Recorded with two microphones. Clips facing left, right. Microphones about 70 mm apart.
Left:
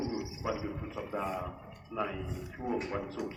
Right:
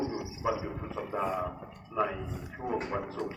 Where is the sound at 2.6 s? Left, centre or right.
Right.